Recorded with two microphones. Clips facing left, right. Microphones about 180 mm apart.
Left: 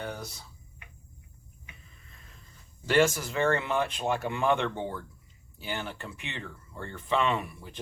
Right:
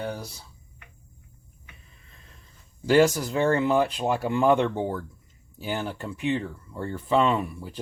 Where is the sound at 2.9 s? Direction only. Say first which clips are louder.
Right 5 dB; 35° right (ahead or behind).